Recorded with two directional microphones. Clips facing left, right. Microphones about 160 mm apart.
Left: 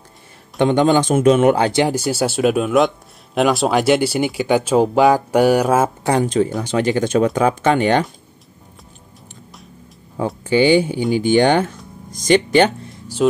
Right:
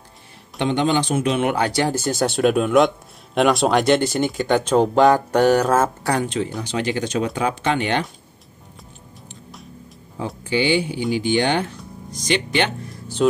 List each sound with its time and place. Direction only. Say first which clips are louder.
0.6 s speech: left 5 dB; 45° left (ahead or behind)
1.6 s speech: left 4 dB; 20° left (ahead or behind)
6.2 s speech: left 7 dB; 45° left (ahead or behind)
10.1 s speech: left 6 dB; 50° left (ahead or behind)
13.2 s speech: left 2 dB; 5° left (ahead or behind)